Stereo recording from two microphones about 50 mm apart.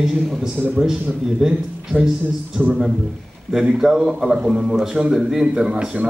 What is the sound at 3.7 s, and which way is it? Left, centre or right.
A man's voice, centre.